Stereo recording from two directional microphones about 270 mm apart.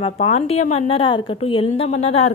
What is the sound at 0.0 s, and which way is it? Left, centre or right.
A woman's voice, left.